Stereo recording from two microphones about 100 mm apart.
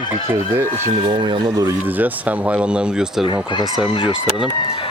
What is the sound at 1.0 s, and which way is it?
Speech, 50° right (ahead or behind).